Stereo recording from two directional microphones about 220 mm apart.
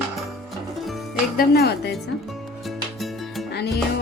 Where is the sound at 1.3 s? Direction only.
45° left (ahead or behind).